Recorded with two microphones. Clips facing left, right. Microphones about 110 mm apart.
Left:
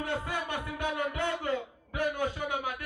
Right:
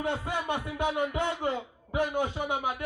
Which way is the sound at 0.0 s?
20° right (ahead or behind).